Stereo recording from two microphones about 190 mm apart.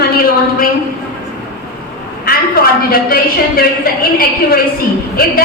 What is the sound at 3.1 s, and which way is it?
Speech, 50° left (ahead or behind).